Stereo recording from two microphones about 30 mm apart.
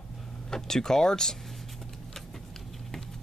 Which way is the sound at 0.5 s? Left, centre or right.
Centre.